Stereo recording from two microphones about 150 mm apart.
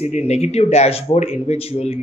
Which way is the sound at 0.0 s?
45° left (ahead or behind).